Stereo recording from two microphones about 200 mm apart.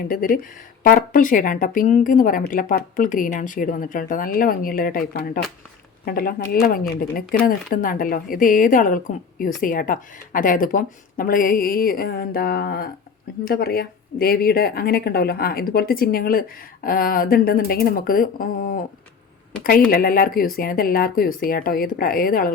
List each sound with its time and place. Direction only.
0.1 s speech: 45° left (ahead or behind)
19.9 s speech: 45° left (ahead or behind)